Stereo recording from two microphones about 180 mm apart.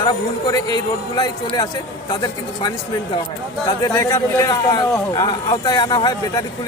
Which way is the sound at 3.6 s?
20° left (ahead or behind).